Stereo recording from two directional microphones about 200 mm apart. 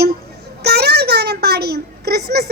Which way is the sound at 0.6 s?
55° right (ahead or behind).